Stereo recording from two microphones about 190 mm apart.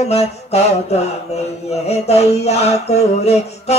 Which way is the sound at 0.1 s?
35° left (ahead or behind).